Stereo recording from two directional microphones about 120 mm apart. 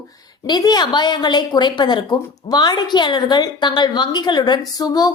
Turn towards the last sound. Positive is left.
turn(degrees=35)  # may be behind; listen again after turning